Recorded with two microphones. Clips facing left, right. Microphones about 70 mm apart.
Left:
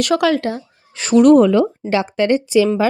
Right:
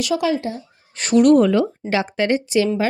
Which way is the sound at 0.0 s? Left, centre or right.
Left.